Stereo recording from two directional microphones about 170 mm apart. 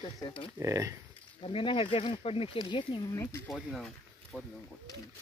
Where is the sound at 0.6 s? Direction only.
15° right (ahead or behind).